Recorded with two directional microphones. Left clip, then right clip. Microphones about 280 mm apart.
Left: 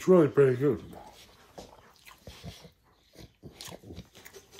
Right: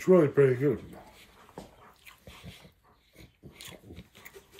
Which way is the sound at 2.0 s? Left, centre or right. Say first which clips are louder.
Left 2 dB; left.